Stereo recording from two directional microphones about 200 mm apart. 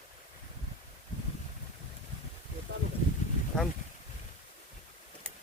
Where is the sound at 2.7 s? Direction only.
55° right (ahead or behind).